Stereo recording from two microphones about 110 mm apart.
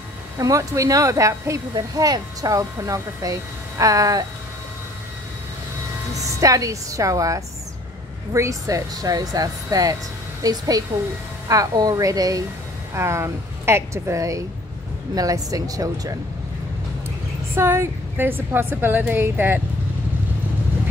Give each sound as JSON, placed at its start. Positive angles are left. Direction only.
{"t": 0.4, "sound": "speech", "side_deg": -30}
{"t": 6.1, "sound": "a woman's voice", "side_deg": -30}
{"t": 17.6, "sound": "a woman's voice", "side_deg": -20}